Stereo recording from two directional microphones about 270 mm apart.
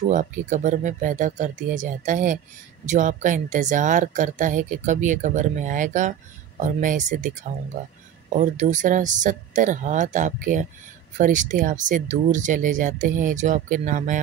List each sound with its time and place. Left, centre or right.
0.1 s speech: right